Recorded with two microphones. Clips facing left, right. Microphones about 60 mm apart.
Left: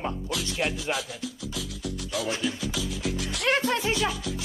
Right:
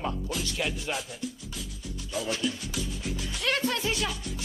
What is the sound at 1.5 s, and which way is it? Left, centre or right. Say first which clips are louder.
Music: left 6 dB; left.